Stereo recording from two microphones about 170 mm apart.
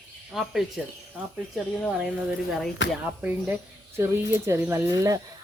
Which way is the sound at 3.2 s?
10° right (ahead or behind).